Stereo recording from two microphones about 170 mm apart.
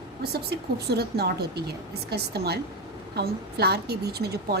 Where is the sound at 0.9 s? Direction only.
70° right (ahead or behind).